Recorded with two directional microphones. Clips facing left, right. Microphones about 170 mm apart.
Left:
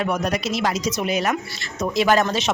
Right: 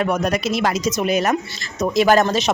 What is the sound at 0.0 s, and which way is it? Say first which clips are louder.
Speech: right 3 dB; 50° right (ahead or behind).